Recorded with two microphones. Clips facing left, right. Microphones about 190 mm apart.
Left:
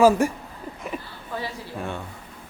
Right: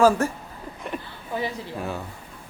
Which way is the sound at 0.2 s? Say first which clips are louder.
Left 3 dB; 15° left (ahead or behind).